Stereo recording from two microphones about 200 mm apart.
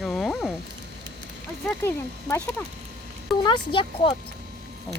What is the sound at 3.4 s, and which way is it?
Speech, 25° left (ahead or behind).